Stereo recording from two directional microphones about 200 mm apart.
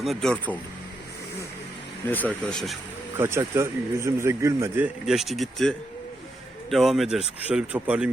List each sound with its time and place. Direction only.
0.0 s a man's voice: centre (ahead or behind)
2.0 s a man's voice: 10° left (ahead or behind)
3.2 s a man's voice: 15° right (ahead or behind)